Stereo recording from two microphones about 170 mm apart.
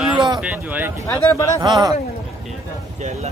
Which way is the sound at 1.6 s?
20° right (ahead or behind).